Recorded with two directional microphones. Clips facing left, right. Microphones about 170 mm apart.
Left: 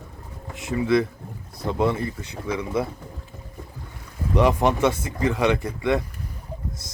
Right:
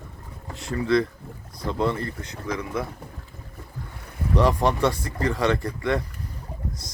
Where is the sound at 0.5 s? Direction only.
20° left (ahead or behind).